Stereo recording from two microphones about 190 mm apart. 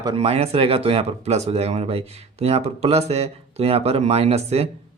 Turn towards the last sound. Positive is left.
turn(degrees=-35)  # may be behind; listen again after turning